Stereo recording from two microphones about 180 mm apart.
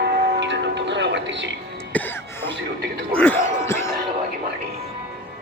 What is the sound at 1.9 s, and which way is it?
Cough, 10° left (ahead or behind).